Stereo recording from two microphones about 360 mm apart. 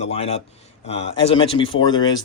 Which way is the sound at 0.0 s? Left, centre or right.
Centre.